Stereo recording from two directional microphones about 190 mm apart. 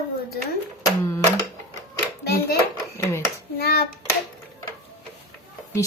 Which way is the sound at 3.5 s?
55° left (ahead or behind).